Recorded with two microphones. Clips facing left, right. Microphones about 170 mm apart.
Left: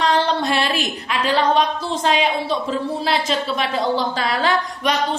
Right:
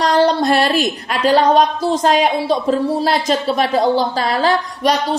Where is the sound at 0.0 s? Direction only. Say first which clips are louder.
Right 5 dB; 40° right (ahead or behind).